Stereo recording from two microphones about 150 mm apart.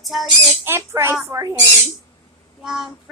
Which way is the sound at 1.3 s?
20° right (ahead or behind).